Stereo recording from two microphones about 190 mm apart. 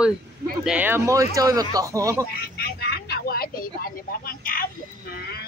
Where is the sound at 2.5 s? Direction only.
60° left (ahead or behind).